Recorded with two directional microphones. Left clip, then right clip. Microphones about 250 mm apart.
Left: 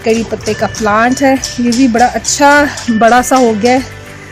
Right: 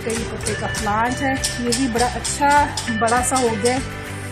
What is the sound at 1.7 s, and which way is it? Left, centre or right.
Music, left.